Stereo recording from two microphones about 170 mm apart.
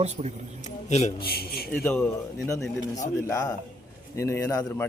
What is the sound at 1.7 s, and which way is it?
Speech, 5° left (ahead or behind).